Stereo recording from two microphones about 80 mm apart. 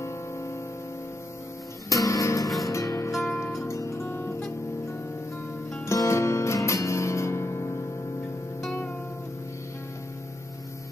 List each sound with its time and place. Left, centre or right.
0.0 s music: left
1.9 s music: left
2.4 s music: centre
2.7 s music: left
5.9 s music: left